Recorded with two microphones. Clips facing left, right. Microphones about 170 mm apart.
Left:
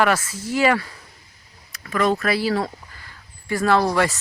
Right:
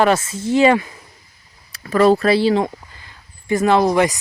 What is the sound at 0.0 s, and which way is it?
Speech, 25° right (ahead or behind).